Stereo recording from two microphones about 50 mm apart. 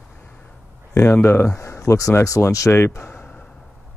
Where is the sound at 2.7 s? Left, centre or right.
Left.